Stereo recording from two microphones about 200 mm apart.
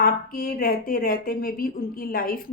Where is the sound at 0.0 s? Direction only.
45° left (ahead or behind).